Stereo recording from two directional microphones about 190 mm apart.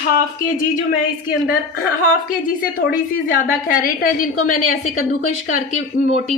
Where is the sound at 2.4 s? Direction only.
50° left (ahead or behind).